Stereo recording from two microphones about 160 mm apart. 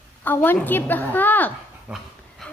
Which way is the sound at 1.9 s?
5° right (ahead or behind).